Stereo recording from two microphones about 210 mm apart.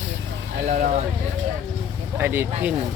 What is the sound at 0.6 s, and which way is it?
Speech, 40° right (ahead or behind).